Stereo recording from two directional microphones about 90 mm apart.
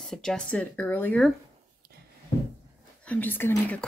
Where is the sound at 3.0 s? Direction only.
20° left (ahead or behind).